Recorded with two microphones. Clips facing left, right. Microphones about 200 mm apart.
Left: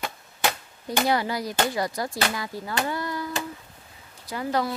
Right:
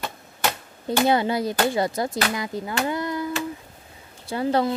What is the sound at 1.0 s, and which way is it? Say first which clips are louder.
Speech: right 5 dB; 25° right (ahead or behind).